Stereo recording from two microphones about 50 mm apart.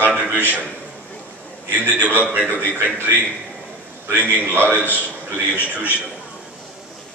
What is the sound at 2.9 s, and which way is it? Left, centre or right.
Speech, right.